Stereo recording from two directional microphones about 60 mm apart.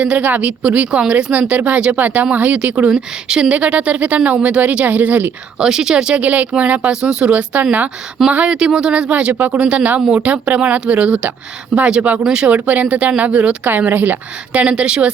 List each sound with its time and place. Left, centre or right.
0.0 s speech: right
2.9 s speech: centre; by 5.3 s right
5.5 s speech: centre
12.5 s speech: right